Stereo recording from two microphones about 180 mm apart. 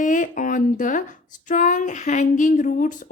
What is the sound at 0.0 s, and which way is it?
Speech, 45° left (ahead or behind).